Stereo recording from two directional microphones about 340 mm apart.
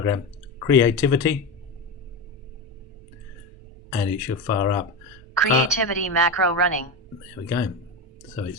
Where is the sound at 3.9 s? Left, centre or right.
Centre.